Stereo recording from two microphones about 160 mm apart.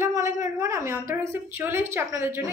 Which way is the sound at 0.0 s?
20° right (ahead or behind).